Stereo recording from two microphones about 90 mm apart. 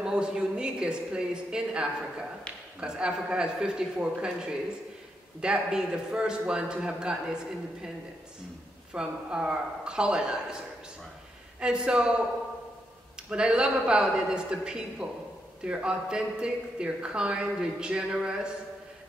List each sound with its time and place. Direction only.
0.0 s a woman's voice: 10° right (ahead or behind)
8.9 s speech: 10° right (ahead or behind)
11.6 s speech: 10° right (ahead or behind)
13.3 s speech: 10° right (ahead or behind)